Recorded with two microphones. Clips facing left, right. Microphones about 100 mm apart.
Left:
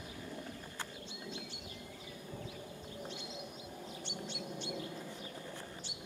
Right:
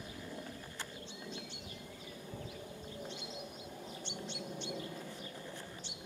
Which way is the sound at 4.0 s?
10° left (ahead or behind).